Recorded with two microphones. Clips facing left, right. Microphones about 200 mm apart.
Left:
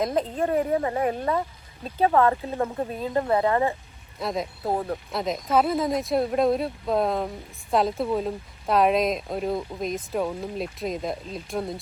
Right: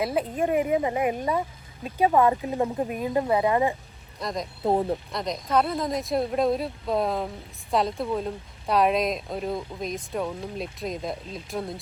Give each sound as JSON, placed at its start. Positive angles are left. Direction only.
{"t": 0.0, "sound": "speech", "side_deg": -10}
{"t": 4.2, "sound": "speech", "side_deg": 5}
{"t": 4.6, "sound": "speech", "side_deg": -25}
{"t": 5.1, "sound": "speech", "side_deg": 5}